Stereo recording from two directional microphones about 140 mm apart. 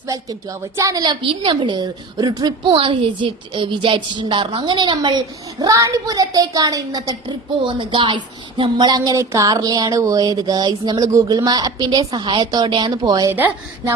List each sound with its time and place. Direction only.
0.1 s a woman's voice: 25° right (ahead or behind)
13.3 s speech: 15° right (ahead or behind)